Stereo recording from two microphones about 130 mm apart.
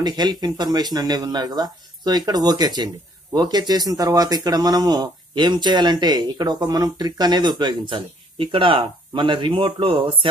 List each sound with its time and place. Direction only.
0.0 s speech: 35° right (ahead or behind)